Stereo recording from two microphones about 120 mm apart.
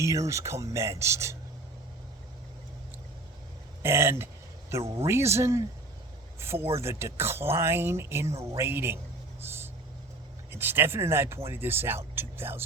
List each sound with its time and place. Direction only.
0.0 s speech: 25° right (ahead or behind)
3.8 s speech: 20° right (ahead or behind)
9.4 s vehicle: 20° right (ahead or behind)
10.5 s speech: 20° right (ahead or behind)